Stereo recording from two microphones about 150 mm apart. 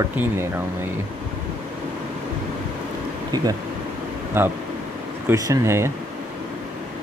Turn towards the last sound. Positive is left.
turn(degrees=-20)  # may be behind; listen again after turning